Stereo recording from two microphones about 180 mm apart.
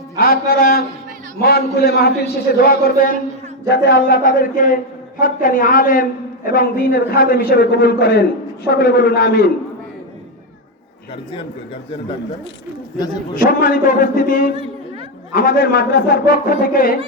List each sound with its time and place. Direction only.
0.2 s a man's voice: 55° left (ahead or behind)
13.3 s a man's voice: 50° left (ahead or behind)